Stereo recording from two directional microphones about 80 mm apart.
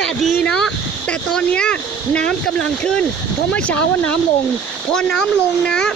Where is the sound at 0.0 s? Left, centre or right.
Centre.